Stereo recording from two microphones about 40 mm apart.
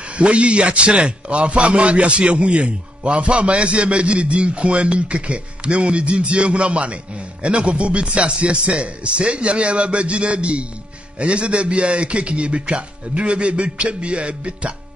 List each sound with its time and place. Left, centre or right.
0.1 s a man's voice: right